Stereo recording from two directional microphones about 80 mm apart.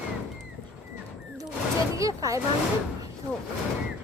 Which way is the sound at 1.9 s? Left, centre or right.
Right.